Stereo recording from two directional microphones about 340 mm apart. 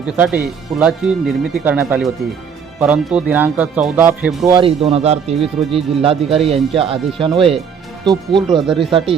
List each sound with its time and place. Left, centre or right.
0.0 s speech: centre
4.5 s speech: centre
8.6 s speech: centre
8.9 s speech: centre